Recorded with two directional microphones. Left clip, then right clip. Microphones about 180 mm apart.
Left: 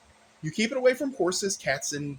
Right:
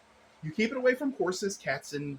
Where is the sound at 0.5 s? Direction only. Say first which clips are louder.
Left 3 dB; 40° left (ahead or behind).